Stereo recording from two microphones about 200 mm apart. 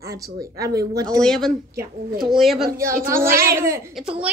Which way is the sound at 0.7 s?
50° right (ahead or behind).